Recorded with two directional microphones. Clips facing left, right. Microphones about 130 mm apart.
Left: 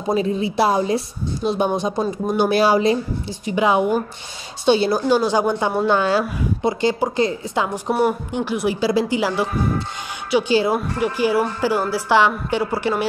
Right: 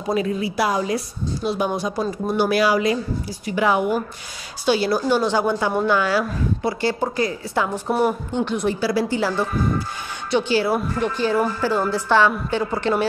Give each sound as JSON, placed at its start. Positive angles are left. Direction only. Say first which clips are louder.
{"t": 0.1, "sound": "a woman's voice", "louder": "left 2 dB", "side_deg": 25}
{"t": 10.5, "sound": "a woman's voice", "louder": "left 2 dB", "side_deg": 20}